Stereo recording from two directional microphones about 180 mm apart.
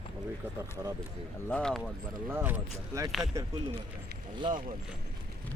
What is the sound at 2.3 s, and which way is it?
Speech, 10° right (ahead or behind).